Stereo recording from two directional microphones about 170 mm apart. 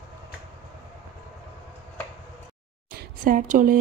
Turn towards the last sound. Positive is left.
turn(degrees=-50)  # may be behind; listen again after turning